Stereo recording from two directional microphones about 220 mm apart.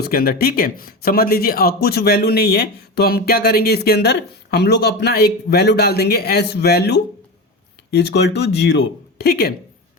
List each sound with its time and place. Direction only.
0.0 s a woman's voice: 45° left (ahead or behind)